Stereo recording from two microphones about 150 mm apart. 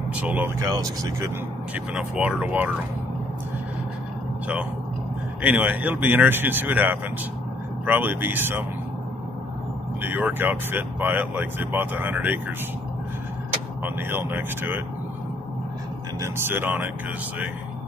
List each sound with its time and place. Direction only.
0.1 s speech: 10° right (ahead or behind)
0.6 s speech: 25° right (ahead or behind)
2.0 s speech: 5° right (ahead or behind)
5.4 s speech: 10° right (ahead or behind)
10.0 s speech: 10° right (ahead or behind)
13.8 s speech: 15° right (ahead or behind)
16.2 s speech: 15° right (ahead or behind)